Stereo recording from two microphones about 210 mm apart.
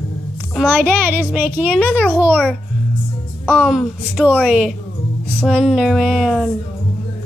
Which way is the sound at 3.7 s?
5° right (ahead or behind).